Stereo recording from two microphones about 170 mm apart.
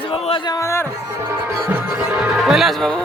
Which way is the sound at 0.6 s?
15° left (ahead or behind).